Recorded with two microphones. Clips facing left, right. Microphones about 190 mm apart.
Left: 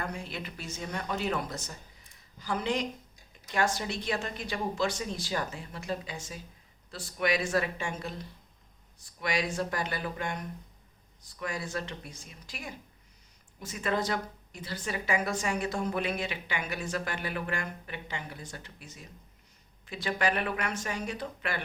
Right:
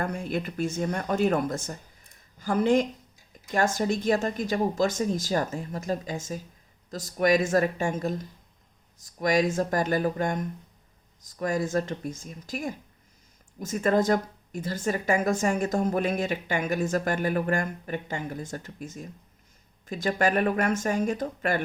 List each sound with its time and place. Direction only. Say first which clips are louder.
0.0 s speech: right 8 dB; 50° right (ahead or behind)